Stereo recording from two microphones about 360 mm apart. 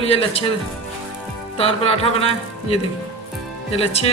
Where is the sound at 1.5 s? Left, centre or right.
Centre.